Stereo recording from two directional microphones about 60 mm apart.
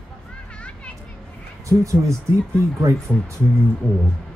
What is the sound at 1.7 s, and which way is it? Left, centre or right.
Speech, right.